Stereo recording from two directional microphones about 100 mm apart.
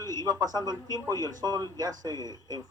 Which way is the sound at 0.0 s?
40° right (ahead or behind).